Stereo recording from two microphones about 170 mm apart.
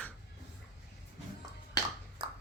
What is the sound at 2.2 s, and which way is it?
Ping, 25° right (ahead or behind).